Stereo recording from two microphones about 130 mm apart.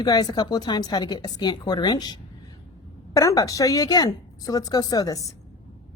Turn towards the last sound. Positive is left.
turn(degrees=30)  # may be behind; listen again after turning